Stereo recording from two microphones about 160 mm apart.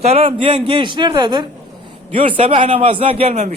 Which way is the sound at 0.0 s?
35° right (ahead or behind).